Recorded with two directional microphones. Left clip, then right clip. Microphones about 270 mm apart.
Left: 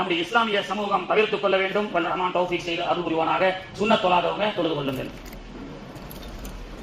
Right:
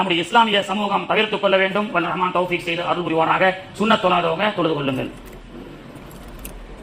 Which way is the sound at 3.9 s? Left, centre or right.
Right.